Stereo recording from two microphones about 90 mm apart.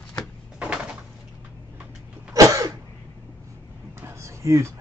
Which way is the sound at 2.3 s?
40° right (ahead or behind).